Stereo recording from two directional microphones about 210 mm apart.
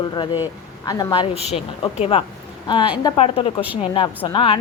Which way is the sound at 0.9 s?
20° left (ahead or behind).